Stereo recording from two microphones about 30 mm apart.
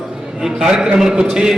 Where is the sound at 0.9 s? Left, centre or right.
Right.